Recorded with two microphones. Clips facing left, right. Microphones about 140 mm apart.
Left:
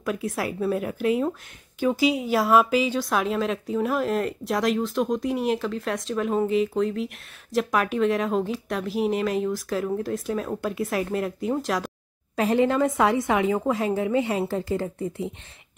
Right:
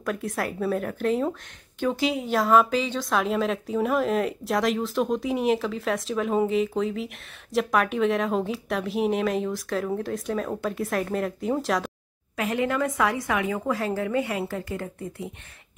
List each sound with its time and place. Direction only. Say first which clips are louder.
0.0 s a woman's voice: left 1 dB; centre (ahead or behind)
12.4 s a woman's voice: left 5 dB; 30° left (ahead or behind)